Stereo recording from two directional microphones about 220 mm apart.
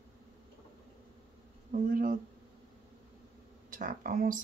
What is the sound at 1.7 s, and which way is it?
Speech, 35° right (ahead or behind).